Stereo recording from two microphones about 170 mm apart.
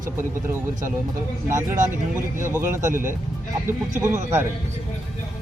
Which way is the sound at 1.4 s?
15° right (ahead or behind).